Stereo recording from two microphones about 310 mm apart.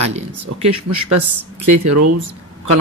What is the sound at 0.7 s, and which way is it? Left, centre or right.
Speech, right.